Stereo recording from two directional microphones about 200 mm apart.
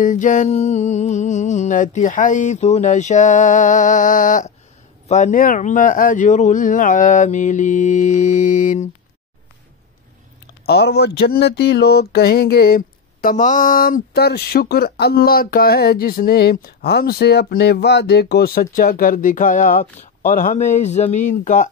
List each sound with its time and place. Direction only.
0.0 s music: 40° left (ahead or behind)
10.4 s speech: 55° left (ahead or behind); by 21.6 s 40° left (ahead or behind)